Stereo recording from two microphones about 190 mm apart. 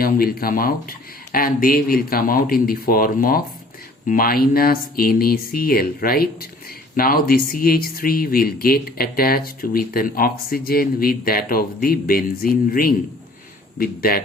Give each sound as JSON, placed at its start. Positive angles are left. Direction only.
{"t": 0.0, "sound": "speech", "side_deg": 50}